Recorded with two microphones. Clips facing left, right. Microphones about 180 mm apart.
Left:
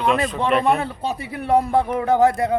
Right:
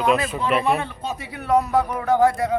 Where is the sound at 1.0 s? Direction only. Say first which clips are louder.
Left 4 dB; 30° left (ahead or behind).